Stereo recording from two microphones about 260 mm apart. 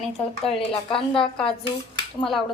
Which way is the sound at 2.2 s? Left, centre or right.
Centre.